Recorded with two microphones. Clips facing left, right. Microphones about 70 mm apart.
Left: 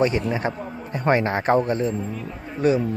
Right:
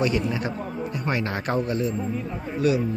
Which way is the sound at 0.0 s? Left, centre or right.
Left.